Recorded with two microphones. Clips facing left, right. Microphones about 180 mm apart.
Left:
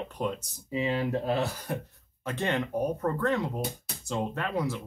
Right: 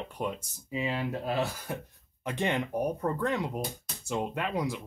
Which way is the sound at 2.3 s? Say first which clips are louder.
Even; 15° right (ahead or behind).